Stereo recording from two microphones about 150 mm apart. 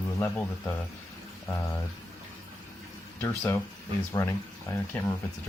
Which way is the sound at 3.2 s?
10° left (ahead or behind).